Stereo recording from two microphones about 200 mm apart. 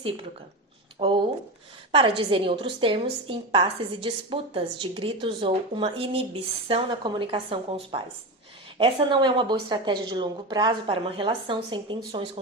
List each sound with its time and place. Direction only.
0.9 s a woman's voice: 25° right (ahead or behind)